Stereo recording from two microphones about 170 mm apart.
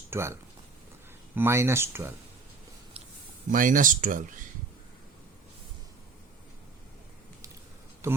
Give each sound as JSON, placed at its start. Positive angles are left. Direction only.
{"t": 0.1, "sound": "speech", "side_deg": -15}
{"t": 1.4, "sound": "speech", "side_deg": -15}
{"t": 3.5, "sound": "speech", "side_deg": -50}
{"t": 8.0, "sound": "speech", "side_deg": -15}